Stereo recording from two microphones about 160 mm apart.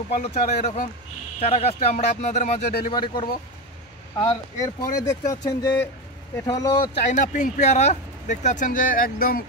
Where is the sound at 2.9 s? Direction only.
30° left (ahead or behind).